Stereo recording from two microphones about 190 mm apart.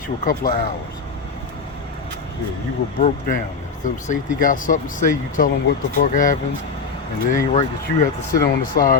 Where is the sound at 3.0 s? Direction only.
45° left (ahead or behind).